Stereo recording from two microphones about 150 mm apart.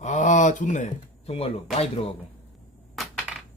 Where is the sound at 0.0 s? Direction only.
55° left (ahead or behind).